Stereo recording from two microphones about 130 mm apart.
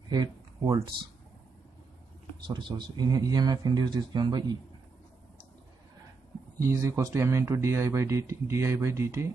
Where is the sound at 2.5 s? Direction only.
35° right (ahead or behind).